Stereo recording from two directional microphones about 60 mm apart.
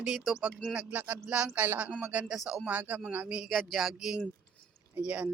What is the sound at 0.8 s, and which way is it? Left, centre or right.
Speech, right.